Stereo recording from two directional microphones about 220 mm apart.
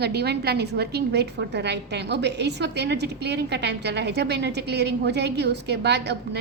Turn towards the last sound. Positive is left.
turn(degrees=-50)  # may be behind; listen again after turning